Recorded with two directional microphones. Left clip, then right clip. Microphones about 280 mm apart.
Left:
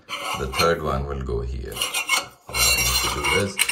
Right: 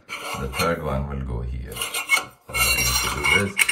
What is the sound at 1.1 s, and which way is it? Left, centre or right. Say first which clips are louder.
Speech: left 6 dB; left.